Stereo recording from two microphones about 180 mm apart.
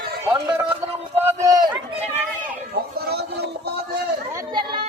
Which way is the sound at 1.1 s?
15° right (ahead or behind).